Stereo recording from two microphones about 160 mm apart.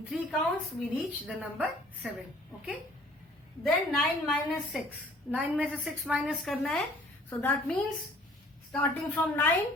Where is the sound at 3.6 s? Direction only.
Centre (ahead or behind).